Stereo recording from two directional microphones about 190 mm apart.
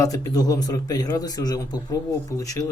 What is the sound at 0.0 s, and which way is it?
Speech, 15° left (ahead or behind).